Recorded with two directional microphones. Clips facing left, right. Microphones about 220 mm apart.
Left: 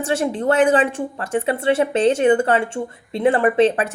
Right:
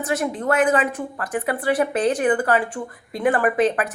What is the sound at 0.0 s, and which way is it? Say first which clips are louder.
A woman's voice: left 3 dB; 30° left (ahead or behind).